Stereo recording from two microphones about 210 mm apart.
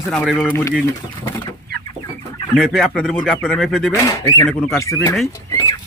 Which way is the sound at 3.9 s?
15° left (ahead or behind).